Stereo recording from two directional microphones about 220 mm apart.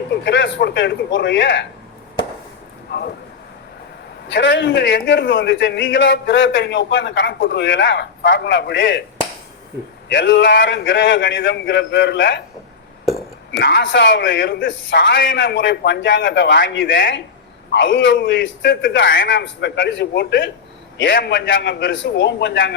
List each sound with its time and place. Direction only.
0.3 s a man's voice: 50° left (ahead or behind)
4.3 s a man's voice: 55° left (ahead or behind)
10.1 s a man's voice: 55° left (ahead or behind)
13.5 s a man's voice: 50° left (ahead or behind)